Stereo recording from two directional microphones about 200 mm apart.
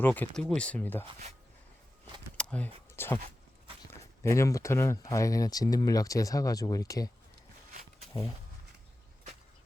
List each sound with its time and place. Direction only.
0.0 s speech: 10° left (ahead or behind)
2.4 s a sound: 5° left (ahead or behind)
2.9 s speech: 10° left (ahead or behind)
4.2 s speech: 15° left (ahead or behind)